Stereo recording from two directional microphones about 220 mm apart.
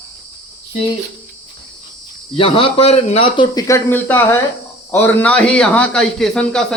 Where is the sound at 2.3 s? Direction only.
25° left (ahead or behind).